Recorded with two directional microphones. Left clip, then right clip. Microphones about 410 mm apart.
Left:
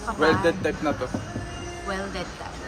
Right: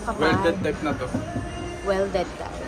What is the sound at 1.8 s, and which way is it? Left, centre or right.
Speech, centre.